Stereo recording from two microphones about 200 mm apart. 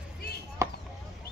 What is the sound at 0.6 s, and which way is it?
Chop, 15° right (ahead or behind).